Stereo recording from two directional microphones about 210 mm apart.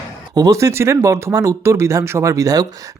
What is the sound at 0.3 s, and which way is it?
Speech, 15° right (ahead or behind).